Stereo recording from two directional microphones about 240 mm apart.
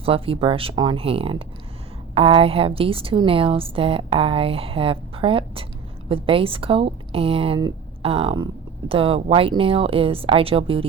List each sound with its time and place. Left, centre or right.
0.0 s a woman's voice: right